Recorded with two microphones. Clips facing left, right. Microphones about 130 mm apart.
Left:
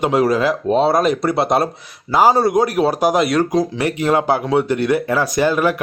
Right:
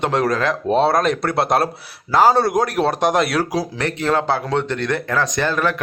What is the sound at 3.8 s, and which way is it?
A man's voice, 10° left (ahead or behind).